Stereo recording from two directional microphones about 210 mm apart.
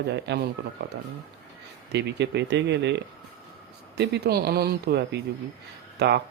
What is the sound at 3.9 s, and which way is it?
Mantra, 55° right (ahead or behind).